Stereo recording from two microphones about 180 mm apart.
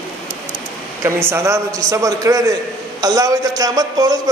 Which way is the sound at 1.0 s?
15° right (ahead or behind).